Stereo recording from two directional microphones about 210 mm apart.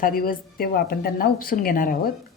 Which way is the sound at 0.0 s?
40° left (ahead or behind).